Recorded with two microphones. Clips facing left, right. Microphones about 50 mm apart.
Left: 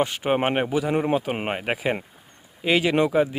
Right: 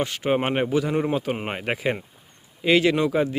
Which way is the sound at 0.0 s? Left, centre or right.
Centre.